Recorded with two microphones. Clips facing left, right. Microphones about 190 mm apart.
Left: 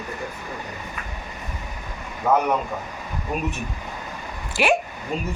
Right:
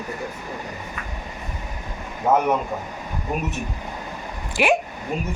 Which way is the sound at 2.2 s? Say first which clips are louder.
Right 1 dB; 10° right (ahead or behind).